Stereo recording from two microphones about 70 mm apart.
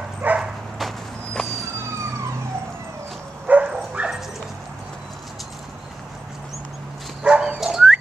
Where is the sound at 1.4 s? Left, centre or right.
Centre.